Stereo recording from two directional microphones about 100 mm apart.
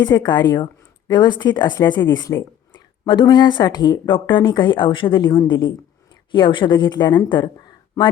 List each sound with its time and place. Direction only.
0.0 s speech: 45° left (ahead or behind)